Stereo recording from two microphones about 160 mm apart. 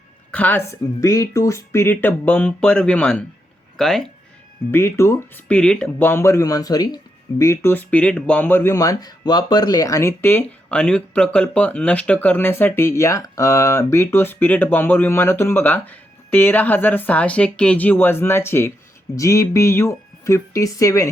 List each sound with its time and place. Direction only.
0.3 s speech: 10° left (ahead or behind)
4.7 s speech: 15° left (ahead or behind)